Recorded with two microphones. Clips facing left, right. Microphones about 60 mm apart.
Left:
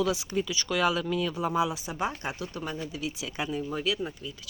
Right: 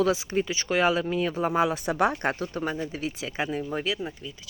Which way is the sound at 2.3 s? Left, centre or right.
Right.